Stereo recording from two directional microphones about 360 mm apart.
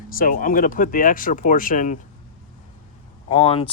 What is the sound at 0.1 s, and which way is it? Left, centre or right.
Speech, left.